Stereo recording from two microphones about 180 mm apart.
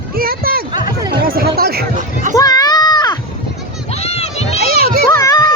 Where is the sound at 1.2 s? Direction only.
55° right (ahead or behind).